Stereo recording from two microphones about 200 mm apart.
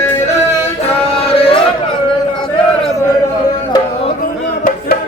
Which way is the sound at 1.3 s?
30° left (ahead or behind).